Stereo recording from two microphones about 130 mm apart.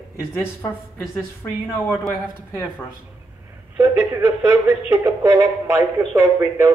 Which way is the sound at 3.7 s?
25° right (ahead or behind).